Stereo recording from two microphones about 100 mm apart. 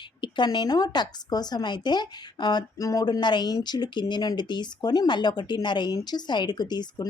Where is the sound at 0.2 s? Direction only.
50° left (ahead or behind).